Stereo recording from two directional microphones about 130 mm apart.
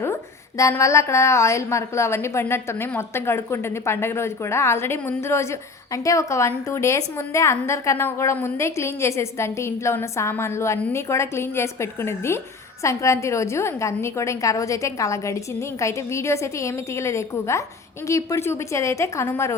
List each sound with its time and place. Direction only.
0.0 s speech: 20° left (ahead or behind)